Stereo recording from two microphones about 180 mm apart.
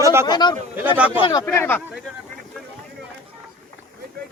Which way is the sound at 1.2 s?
20° left (ahead or behind).